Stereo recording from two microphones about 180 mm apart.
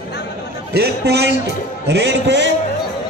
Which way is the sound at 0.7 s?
65° right (ahead or behind).